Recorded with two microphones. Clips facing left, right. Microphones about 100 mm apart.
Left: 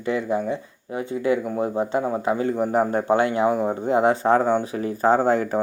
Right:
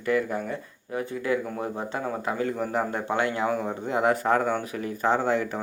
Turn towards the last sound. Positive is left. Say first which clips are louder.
# left 5 dB
turn(degrees=40)  # may be behind; listen again after turning